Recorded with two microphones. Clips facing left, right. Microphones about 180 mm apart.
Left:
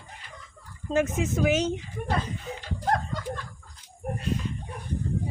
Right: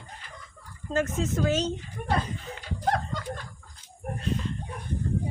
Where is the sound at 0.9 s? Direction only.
15° left (ahead or behind).